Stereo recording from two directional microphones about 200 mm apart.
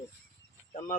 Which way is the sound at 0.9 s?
45° left (ahead or behind).